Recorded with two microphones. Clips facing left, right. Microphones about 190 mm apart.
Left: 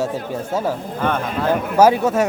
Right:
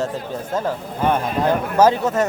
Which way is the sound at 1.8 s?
10° left (ahead or behind).